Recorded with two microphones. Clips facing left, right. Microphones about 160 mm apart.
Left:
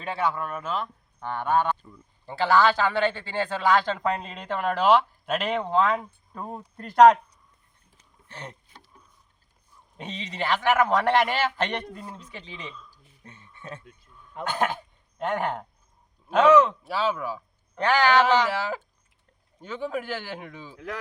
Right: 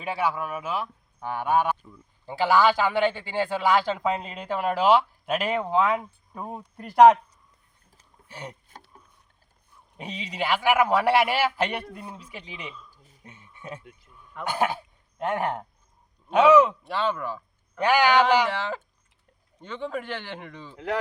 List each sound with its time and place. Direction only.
0.0 s speech: 10° right (ahead or behind)
8.3 s speech: 10° right (ahead or behind)
10.0 s speech: 10° right (ahead or behind)
14.1 s a sound: 10° right (ahead or behind)
14.4 s speech: 10° right (ahead or behind)
16.8 s a man's voice: 5° left (ahead or behind)
17.7 s speech: 10° right (ahead or behind)
18.4 s a man's voice: 5° left (ahead or behind)
20.7 s speech: 70° right (ahead or behind)